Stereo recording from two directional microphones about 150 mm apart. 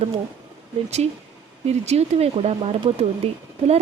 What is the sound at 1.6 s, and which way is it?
Speech, 45° right (ahead or behind).